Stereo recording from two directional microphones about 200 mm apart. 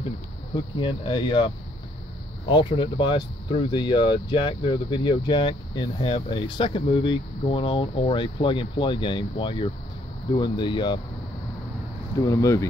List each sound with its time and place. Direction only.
0.7 s speech: 25° left (ahead or behind)
12.2 s speech: 15° left (ahead or behind)